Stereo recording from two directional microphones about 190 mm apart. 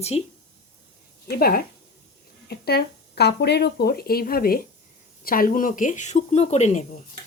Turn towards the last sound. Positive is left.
turn(degrees=35)  # may be behind; listen again after turning